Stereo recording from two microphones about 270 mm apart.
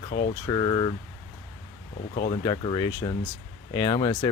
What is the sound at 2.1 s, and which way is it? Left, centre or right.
Speech, left.